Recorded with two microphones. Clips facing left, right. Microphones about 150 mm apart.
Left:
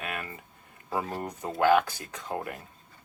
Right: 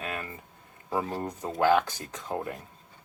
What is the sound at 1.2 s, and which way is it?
Speech, 5° left (ahead or behind).